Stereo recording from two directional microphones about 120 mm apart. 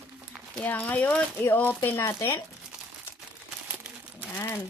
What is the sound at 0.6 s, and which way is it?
Speech, 15° left (ahead or behind).